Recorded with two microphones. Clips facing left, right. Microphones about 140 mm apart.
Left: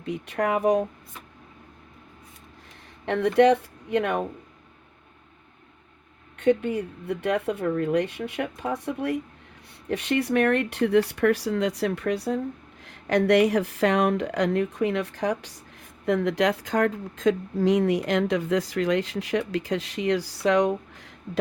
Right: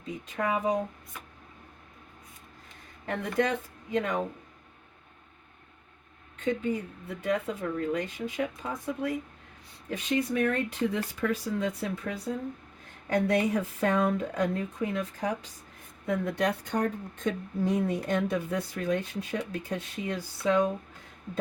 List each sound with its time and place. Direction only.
0.0 s speech: 70° left (ahead or behind)
3.1 s speech: 70° left (ahead or behind)
6.3 s speech: 65° left (ahead or behind)
12.8 s a woman's voice: 90° left